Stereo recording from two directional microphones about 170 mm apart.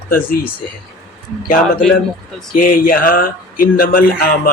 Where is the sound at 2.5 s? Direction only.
55° left (ahead or behind).